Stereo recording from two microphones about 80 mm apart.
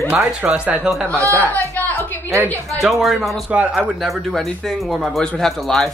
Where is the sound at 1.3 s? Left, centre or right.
Centre.